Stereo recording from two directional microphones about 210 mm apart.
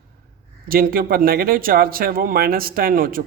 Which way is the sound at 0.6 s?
45° right (ahead or behind).